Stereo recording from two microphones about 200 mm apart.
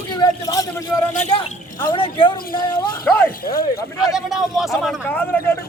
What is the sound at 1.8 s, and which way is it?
Speech, 25° left (ahead or behind).